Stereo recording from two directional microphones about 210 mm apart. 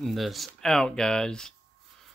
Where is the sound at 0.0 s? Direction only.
Centre (ahead or behind).